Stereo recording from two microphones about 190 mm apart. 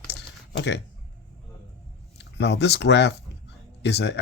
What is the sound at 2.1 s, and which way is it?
Speech, 60° left (ahead or behind).